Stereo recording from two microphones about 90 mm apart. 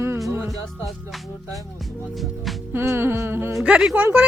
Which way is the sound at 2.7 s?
25° right (ahead or behind).